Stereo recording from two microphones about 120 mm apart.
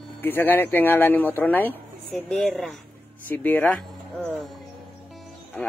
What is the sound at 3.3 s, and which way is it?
Speech, 15° left (ahead or behind).